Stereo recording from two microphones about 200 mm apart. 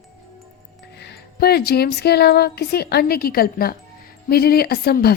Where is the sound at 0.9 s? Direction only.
55° left (ahead or behind).